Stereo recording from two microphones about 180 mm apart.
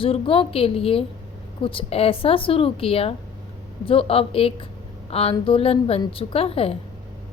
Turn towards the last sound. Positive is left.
turn(degrees=30)  # may be behind; listen again after turning